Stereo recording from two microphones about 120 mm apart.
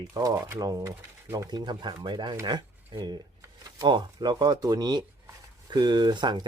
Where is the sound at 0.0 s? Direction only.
30° right (ahead or behind).